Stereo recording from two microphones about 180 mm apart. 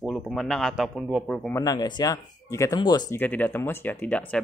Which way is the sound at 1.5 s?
20° left (ahead or behind).